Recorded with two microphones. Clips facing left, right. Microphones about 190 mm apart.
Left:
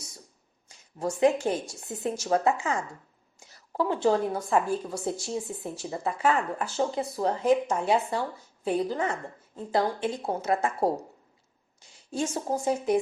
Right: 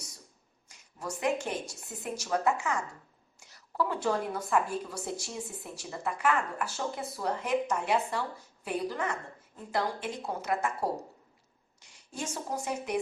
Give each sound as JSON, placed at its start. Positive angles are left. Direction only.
{"t": 1.2, "sound": "speech", "side_deg": 30}
{"t": 12.1, "sound": "speech", "side_deg": 30}